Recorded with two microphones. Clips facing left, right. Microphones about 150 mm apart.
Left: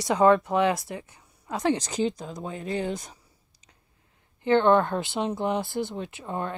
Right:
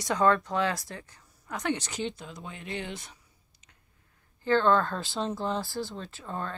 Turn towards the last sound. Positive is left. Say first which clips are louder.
# left 4 dB
turn(degrees=15)  # may be behind; listen again after turning